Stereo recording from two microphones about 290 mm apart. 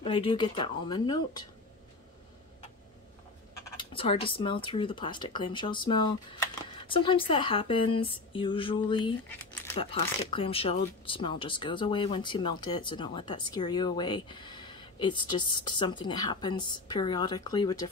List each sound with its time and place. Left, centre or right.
0.0 s speech: centre
3.7 s speech: centre